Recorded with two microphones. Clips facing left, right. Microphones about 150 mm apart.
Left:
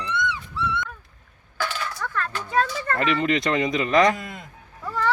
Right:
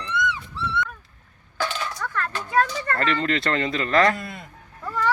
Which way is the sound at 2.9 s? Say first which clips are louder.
Left 1 dB; 15° left (ahead or behind).